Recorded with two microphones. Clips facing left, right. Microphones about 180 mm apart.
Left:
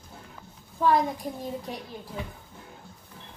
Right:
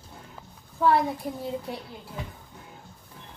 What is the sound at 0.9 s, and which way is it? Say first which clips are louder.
Speech: even; 15° left (ahead or behind).